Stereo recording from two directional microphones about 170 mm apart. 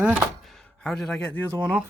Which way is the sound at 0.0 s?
Centre (ahead or behind).